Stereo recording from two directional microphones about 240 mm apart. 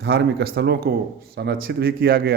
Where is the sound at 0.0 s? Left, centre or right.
Right.